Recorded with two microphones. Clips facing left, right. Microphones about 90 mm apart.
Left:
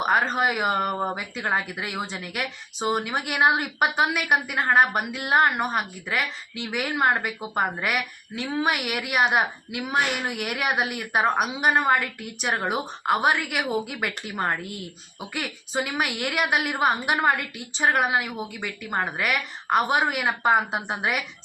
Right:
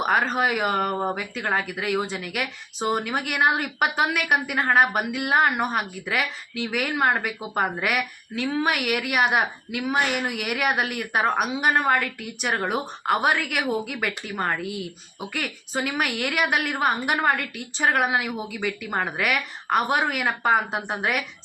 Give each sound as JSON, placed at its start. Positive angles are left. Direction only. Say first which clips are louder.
{"t": 0.0, "sound": "speech", "louder": "even", "side_deg": 0}